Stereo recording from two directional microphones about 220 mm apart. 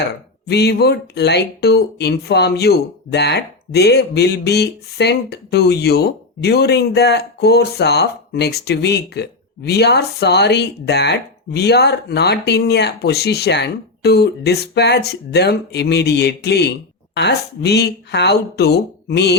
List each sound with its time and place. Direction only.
0.4 s speech: 50° left (ahead or behind)